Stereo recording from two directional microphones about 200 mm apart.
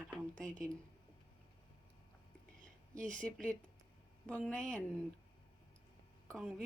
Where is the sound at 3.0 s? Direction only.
5° left (ahead or behind).